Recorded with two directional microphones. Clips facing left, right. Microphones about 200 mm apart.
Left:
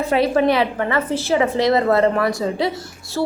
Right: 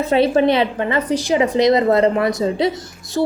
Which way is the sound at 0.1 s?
25° right (ahead or behind).